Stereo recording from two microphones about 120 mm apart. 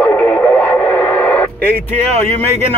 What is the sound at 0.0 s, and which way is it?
Radio, 20° left (ahead or behind).